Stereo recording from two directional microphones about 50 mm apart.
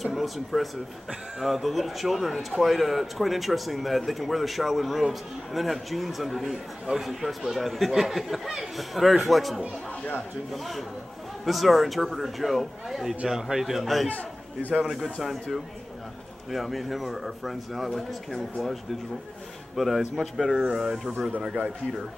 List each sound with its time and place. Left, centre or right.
0.0 s a man's voice: centre
14.0 s a man's voice: left
14.9 s a man's voice: centre
16.5 s a man's voice: centre